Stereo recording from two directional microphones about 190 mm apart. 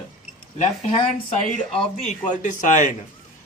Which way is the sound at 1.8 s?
40° left (ahead or behind).